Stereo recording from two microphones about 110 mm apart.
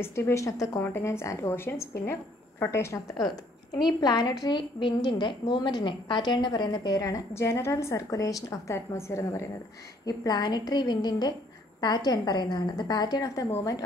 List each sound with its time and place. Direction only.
0.0 s speech: 25° left (ahead or behind)
4.0 s a woman's voice: 40° left (ahead or behind)
10.0 s a woman's voice: 35° left (ahead or behind)